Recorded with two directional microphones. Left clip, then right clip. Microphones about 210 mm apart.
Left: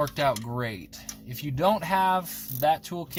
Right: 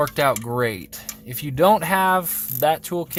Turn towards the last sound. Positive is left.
turn(degrees=-60)  # may be behind; listen again after turning